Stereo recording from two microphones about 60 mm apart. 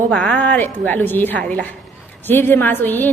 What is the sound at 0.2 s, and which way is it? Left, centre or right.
A woman's voice, left.